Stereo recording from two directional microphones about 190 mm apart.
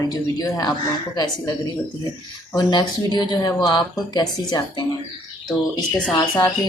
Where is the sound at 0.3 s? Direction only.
20° left (ahead or behind).